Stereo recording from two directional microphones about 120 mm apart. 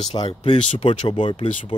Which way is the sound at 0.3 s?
45° left (ahead or behind).